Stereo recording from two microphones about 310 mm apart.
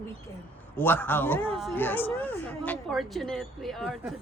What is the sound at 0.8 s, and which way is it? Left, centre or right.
Speech, centre.